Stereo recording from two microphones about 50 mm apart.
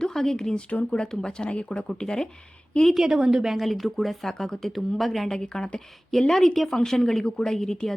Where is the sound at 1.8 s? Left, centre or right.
Centre.